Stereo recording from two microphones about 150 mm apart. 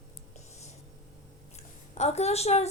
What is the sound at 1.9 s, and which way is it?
Speech, 45° left (ahead or behind).